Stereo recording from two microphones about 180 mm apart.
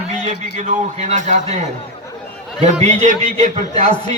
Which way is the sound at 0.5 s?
40° right (ahead or behind).